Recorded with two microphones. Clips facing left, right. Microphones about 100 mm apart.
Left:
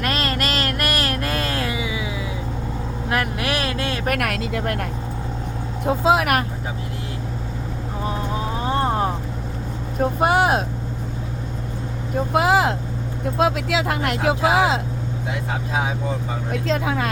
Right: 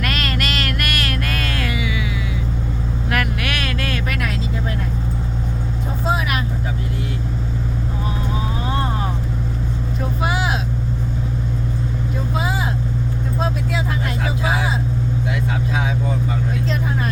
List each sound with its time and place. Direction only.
0.0 s a sound: 30° left (ahead or behind)
3.1 s a sound: 30° left (ahead or behind)
4.0 s vehicle: 55° left (ahead or behind)
5.8 s vehicle: 90° left
8.6 s vehicle: 35° left (ahead or behind)
10.0 s vehicle: 50° left (ahead or behind)
12.3 s vehicle: 75° left (ahead or behind)
13.4 s vehicle: 85° left
16.5 s vehicle: 90° left